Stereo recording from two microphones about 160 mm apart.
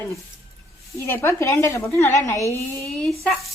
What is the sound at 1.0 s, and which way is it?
A woman's voice, 15° left (ahead or behind).